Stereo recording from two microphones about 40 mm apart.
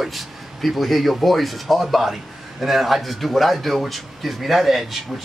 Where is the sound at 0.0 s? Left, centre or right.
Centre.